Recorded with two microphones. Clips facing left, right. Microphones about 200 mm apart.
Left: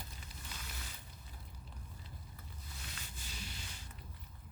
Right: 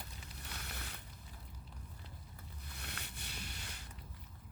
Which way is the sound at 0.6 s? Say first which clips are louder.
Right 2 dB; 60° right (ahead or behind).